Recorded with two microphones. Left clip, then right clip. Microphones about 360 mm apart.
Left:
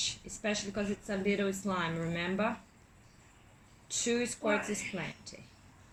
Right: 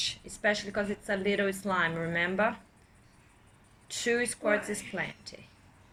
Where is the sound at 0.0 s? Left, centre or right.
Right.